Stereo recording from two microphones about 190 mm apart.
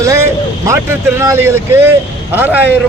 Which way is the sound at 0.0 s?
15° right (ahead or behind).